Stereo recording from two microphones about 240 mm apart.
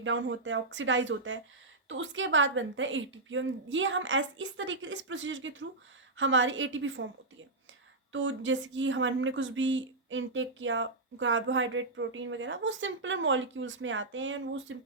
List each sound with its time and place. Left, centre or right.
0.0 s a woman's voice: right
8.1 s a woman's voice: right